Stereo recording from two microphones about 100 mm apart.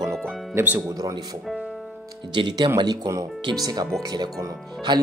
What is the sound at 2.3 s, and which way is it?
Speech, 50° right (ahead or behind).